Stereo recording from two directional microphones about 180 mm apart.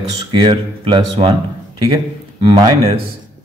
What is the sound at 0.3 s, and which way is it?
A man's voice, 30° right (ahead or behind).